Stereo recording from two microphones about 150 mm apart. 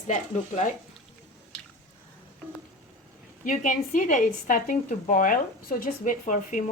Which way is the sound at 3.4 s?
60° left (ahead or behind).